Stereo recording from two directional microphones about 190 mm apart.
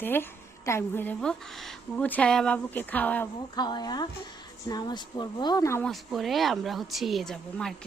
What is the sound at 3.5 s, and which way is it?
Speech, 20° left (ahead or behind).